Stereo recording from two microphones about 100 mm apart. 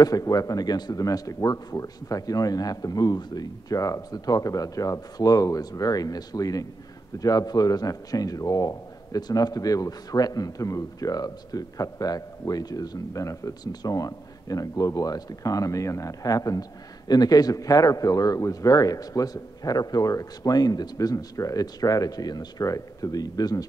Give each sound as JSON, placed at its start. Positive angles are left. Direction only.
{"t": 0.0, "sound": "speech", "side_deg": 40}